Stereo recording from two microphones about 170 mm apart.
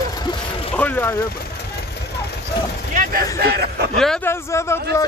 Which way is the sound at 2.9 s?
60° right (ahead or behind).